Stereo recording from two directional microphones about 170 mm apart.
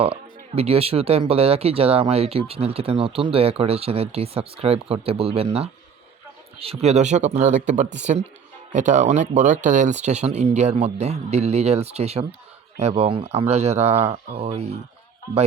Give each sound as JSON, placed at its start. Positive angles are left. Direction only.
{"t": 0.0, "sound": "speech", "side_deg": -35}